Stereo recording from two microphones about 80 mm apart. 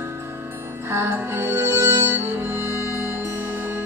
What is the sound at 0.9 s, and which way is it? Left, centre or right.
Music, right.